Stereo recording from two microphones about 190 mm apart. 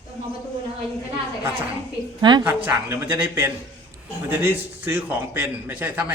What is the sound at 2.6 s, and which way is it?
Speech, 10° right (ahead or behind).